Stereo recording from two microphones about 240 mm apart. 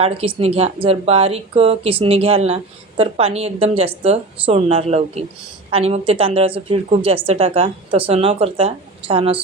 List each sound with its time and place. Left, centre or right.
0.0 s speech: right